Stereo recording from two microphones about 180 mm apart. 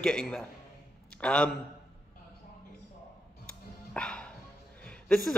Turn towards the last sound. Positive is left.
turn(degrees=5)  # may be behind; listen again after turning